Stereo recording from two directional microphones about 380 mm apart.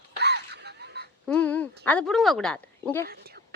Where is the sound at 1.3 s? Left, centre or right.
Centre.